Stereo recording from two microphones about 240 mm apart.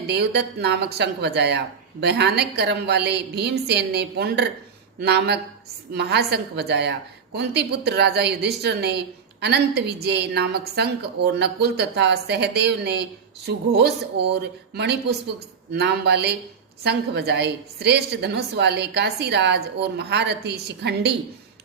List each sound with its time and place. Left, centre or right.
0.1 s speech: right